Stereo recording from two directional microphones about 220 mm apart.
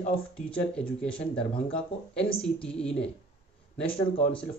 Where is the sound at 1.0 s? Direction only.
5° left (ahead or behind).